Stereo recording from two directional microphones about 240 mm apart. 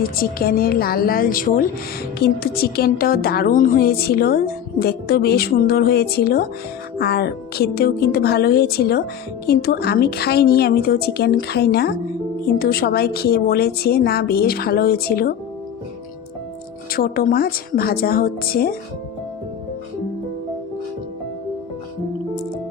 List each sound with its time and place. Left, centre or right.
0.0 s a woman's voice: left
16.9 s a woman's voice: left